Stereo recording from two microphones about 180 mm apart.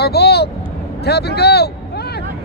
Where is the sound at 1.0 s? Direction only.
65° left (ahead or behind).